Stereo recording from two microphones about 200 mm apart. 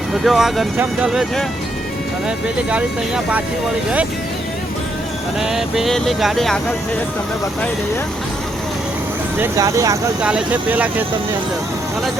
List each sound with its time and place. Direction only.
0.1 s speech: centre (ahead or behind)
5.4 s speech: centre (ahead or behind)
9.4 s speech: 15° right (ahead or behind)
10.2 s speech: 5° right (ahead or behind)